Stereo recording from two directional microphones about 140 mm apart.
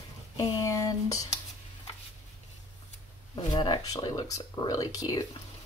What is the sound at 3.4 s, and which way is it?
Speech, 30° left (ahead or behind).